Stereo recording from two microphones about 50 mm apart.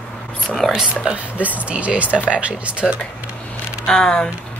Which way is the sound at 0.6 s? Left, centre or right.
Centre.